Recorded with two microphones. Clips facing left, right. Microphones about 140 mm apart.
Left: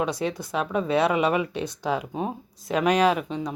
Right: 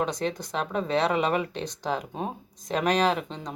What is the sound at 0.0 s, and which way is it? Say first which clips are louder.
Speech: left 2 dB; 10° left (ahead or behind).